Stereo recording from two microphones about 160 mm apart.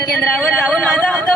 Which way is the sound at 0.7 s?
10° left (ahead or behind).